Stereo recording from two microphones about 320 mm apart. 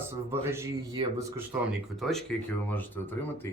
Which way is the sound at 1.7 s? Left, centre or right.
Centre.